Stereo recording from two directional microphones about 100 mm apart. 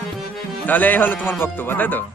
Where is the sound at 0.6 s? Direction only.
15° left (ahead or behind).